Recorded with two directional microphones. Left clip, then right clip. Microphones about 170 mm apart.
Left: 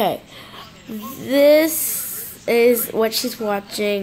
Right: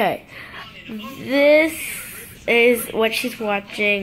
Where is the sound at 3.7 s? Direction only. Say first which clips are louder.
Right 2 dB; 20° left (ahead or behind).